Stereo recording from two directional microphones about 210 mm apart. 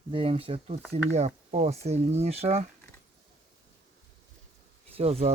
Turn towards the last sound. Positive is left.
turn(degrees=-30)  # may be behind; listen again after turning